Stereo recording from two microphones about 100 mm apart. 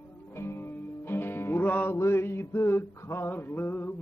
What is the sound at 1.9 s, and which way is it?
Male singing, 25° left (ahead or behind).